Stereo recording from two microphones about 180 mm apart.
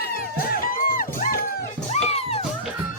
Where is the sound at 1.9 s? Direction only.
35° left (ahead or behind).